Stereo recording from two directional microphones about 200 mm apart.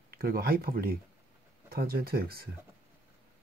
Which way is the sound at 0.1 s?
50° right (ahead or behind).